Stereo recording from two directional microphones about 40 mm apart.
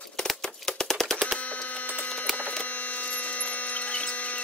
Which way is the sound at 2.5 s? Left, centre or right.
Left.